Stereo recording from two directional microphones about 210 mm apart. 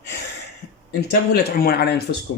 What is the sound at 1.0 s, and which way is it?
Speech, 50° left (ahead or behind).